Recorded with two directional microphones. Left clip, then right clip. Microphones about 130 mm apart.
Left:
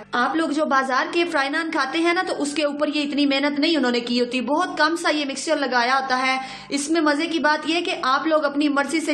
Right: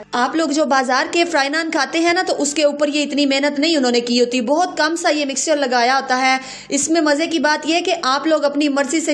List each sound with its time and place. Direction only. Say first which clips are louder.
0.2 s a woman's voice: right 4 dB; 40° right (ahead or behind)